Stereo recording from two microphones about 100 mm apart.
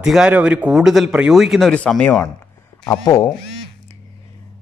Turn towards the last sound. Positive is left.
turn(degrees=30)  # may be behind; listen again after turning